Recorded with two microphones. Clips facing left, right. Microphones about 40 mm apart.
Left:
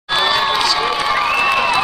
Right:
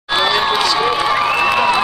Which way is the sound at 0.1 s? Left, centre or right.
Centre.